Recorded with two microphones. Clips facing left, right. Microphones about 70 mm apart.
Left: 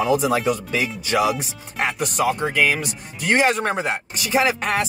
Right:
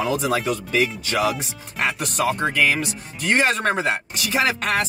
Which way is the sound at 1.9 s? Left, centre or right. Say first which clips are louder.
Left 1 dB; centre.